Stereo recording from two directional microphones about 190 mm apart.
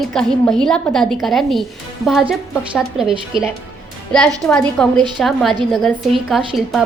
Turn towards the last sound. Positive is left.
turn(degrees=0)  # may be behind; listen again after turning